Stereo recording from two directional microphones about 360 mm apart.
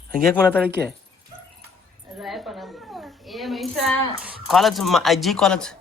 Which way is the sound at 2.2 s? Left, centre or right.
Centre.